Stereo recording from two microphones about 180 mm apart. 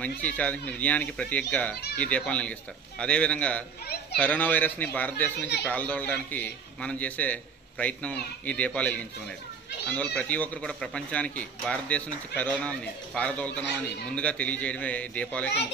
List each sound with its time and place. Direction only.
0.4 s a man's voice: 10° left (ahead or behind)
3.8 s a child's voice: 65° left (ahead or behind)
4.2 s a man's voice: 10° left (ahead or behind)